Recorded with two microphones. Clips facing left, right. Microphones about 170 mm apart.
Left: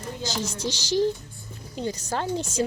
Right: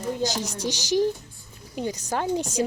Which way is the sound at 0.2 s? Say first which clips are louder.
Right 3 dB; 15° right (ahead or behind).